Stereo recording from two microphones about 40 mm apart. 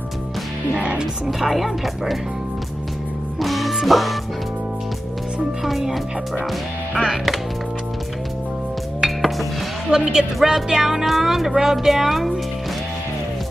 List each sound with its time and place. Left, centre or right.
0.7 s speech: right
1.2 s speech: centre
3.3 s music: centre
5.6 s music: centre
6.9 s speech: centre
9.0 s music: centre
9.8 s speech: centre